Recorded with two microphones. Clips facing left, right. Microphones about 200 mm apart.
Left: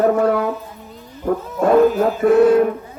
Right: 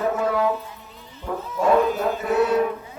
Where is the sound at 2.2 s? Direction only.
50° left (ahead or behind).